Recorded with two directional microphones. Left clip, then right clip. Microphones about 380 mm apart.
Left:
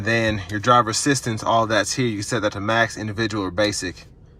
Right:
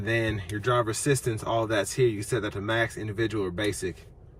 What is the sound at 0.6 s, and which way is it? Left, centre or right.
Speech, centre.